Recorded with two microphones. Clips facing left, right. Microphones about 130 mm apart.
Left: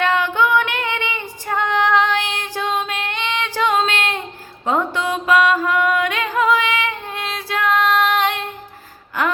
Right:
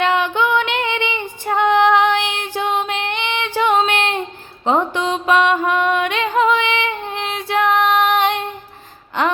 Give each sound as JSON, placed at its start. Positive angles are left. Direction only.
{"t": 0.0, "sound": "female singing", "side_deg": -20}
{"t": 4.6, "sound": "mantra", "side_deg": -20}
{"t": 4.9, "sound": "music", "side_deg": -25}
{"t": 9.2, "sound": "gasp", "side_deg": -25}